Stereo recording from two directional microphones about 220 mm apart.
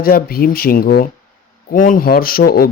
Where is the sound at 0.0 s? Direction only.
40° left (ahead or behind).